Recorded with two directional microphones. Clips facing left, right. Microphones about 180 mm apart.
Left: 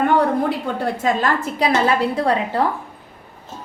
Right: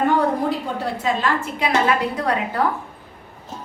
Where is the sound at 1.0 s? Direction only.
40° left (ahead or behind).